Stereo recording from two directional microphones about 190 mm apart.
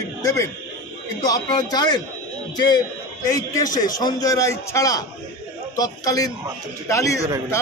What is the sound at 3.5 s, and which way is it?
A man's voice, 20° left (ahead or behind).